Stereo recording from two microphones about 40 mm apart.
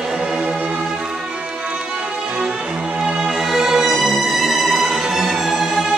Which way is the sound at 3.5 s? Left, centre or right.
Centre.